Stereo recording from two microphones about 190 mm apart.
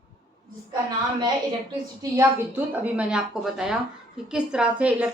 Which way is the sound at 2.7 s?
5° right (ahead or behind).